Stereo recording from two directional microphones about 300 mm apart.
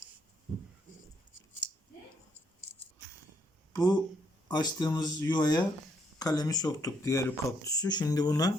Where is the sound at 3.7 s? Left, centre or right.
Centre.